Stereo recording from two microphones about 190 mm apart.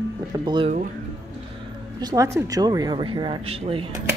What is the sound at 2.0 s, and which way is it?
Speech, 20° right (ahead or behind).